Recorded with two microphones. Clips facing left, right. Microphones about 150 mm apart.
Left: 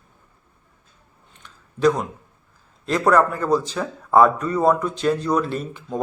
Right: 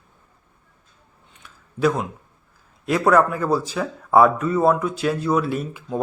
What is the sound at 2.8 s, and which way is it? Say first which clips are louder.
Speech: right 1 dB; 10° right (ahead or behind).